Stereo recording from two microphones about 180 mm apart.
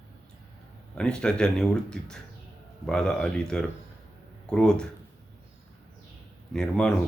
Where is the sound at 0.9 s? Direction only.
5° left (ahead or behind).